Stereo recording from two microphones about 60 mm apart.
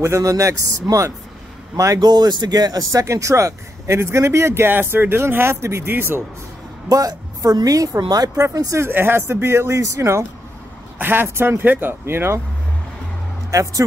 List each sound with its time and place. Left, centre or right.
0.0 s speech: right
2.5 s speech: right
6.9 s speech: right
8.8 s speech: right
9.3 s speech: right
11.0 s speech: right
11.2 s speech: right
11.6 s speech: right
13.5 s speech: right